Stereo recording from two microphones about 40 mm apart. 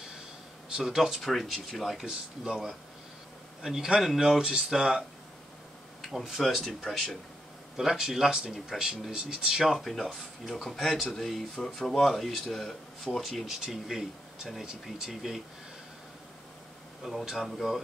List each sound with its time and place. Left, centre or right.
0.7 s speech: centre
1.3 s speech: centre
2.0 s speech: centre
6.0 s speech: centre
7.7 s speech: centre
9.8 s speech: centre
13.5 s speech: centre
17.2 s speech: centre